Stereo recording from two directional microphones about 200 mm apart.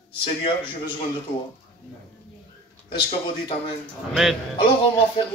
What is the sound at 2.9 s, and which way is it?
Speech, 25° left (ahead or behind).